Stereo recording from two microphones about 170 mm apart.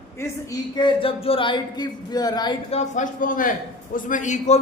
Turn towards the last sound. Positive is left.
turn(degrees=45)  # may be behind; listen again after turning